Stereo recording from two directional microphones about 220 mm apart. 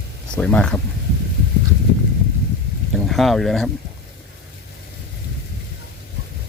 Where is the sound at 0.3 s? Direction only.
5° left (ahead or behind).